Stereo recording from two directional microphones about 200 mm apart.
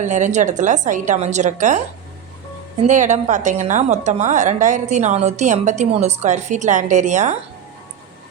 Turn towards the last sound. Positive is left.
turn(degrees=-35)  # may be behind; listen again after turning